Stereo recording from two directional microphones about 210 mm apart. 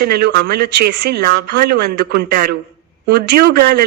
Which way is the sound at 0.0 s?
50° right (ahead or behind).